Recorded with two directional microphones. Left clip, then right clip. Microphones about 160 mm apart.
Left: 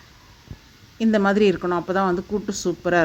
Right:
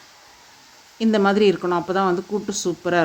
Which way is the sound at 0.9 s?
25° left (ahead or behind).